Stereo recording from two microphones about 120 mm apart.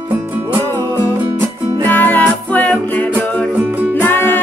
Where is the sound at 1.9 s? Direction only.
15° left (ahead or behind).